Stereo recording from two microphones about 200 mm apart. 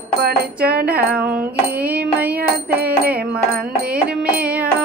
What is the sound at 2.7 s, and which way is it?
Music, 50° right (ahead or behind).